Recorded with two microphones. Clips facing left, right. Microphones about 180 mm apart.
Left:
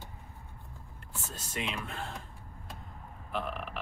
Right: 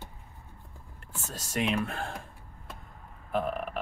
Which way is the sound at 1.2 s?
45° right (ahead or behind).